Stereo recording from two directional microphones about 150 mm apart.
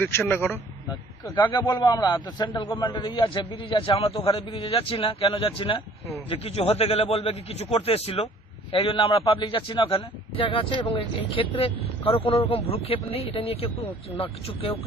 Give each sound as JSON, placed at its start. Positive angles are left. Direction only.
{"t": 0.3, "sound": "speech", "side_deg": 15}
{"t": 0.9, "sound": "a man's voice", "side_deg": 30}